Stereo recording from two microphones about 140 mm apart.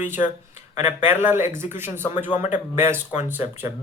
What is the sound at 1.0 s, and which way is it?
A man's voice, 15° right (ahead or behind).